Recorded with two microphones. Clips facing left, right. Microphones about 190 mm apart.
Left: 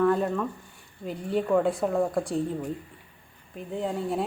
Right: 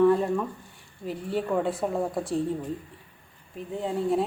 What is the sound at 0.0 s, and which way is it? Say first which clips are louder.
Speech: right 2 dB; 5° right (ahead or behind).